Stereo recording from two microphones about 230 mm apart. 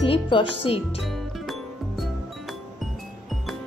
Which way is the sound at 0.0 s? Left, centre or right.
Left.